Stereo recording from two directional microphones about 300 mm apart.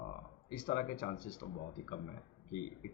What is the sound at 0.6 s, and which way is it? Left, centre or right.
A man's voice, left.